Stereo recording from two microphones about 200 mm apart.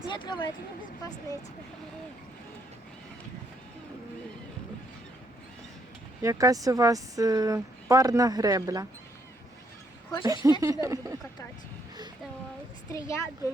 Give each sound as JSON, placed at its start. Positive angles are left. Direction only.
{"t": 0.1, "sound": "speech", "side_deg": 25}
{"t": 6.2, "sound": "a woman's voice", "side_deg": -15}
{"t": 10.2, "sound": "a woman's voice", "side_deg": -20}
{"t": 12.9, "sound": "speech", "side_deg": 15}